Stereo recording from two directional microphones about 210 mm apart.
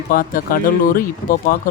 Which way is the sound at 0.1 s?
45° left (ahead or behind).